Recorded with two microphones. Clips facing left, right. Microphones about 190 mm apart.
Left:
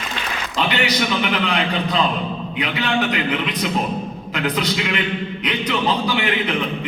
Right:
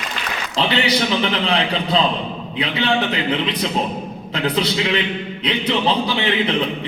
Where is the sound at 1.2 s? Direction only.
30° right (ahead or behind).